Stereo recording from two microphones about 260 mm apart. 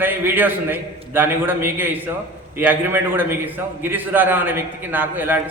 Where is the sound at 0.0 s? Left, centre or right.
Centre.